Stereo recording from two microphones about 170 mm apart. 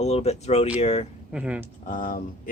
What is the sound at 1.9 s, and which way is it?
Speech, 55° left (ahead or behind).